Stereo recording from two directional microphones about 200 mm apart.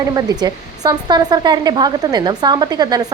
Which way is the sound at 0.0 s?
20° right (ahead or behind).